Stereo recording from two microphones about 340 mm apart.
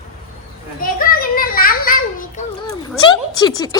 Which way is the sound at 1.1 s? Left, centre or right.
Left.